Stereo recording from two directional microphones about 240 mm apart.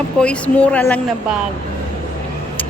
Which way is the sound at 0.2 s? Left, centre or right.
Centre.